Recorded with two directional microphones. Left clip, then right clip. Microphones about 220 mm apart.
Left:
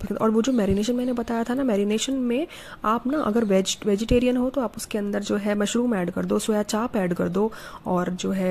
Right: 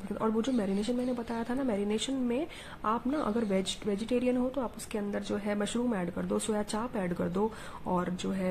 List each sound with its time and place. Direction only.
0.1 s speech: 30° left (ahead or behind)